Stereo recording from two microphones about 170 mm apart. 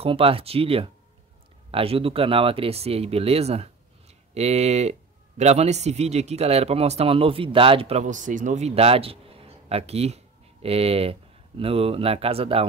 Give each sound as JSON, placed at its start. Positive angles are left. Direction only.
{"t": 0.0, "sound": "speech", "side_deg": -35}